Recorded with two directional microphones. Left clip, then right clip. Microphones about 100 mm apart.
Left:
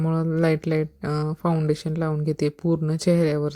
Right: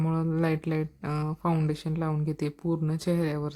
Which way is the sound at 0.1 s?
40° left (ahead or behind).